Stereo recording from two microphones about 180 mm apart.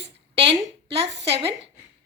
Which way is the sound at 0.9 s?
35° right (ahead or behind).